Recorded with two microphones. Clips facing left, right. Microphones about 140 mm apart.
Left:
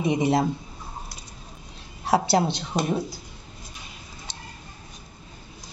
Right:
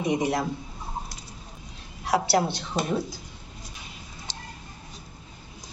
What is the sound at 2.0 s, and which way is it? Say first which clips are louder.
Speech: left 2 dB; 25° left (ahead or behind).